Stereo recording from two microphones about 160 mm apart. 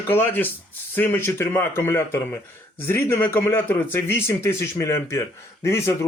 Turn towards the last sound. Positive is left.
turn(degrees=15)  # may be behind; listen again after turning